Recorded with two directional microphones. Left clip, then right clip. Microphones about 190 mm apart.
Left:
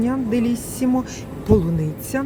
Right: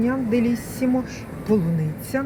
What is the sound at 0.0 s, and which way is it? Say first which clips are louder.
Speech: even; 10° left (ahead or behind).